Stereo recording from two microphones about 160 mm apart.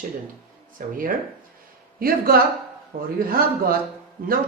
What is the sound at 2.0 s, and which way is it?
Speech, 70° right (ahead or behind).